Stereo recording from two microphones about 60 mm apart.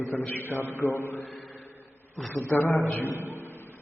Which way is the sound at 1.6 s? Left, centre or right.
Left.